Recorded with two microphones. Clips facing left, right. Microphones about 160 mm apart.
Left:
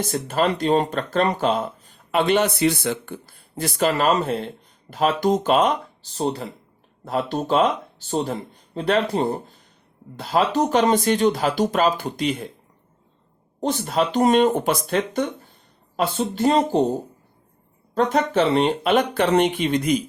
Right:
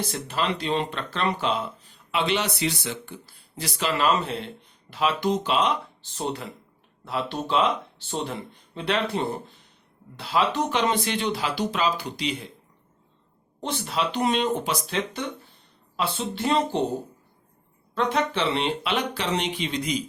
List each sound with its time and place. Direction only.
0.0 s speech: 45° left (ahead or behind)
13.6 s speech: 45° left (ahead or behind)
17.9 s speech: 45° left (ahead or behind)